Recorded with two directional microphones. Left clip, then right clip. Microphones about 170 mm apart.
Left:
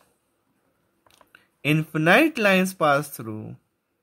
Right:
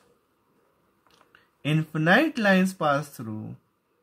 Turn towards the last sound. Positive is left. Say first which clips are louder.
# left 4 dB
turn(degrees=45)  # may be behind; listen again after turning